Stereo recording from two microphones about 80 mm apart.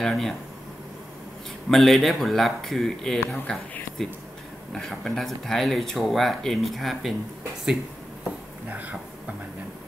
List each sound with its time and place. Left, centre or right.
0.0 s speech: centre
1.7 s speech: centre
8.6 s speech: centre